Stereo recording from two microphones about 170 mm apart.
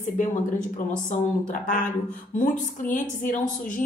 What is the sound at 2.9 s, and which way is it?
Speech, 50° left (ahead or behind).